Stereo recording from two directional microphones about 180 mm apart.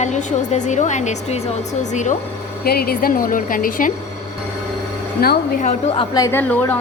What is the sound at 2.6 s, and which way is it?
A woman's voice, 60° left (ahead or behind).